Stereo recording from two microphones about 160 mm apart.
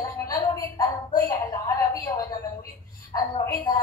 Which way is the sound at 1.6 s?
20° left (ahead or behind).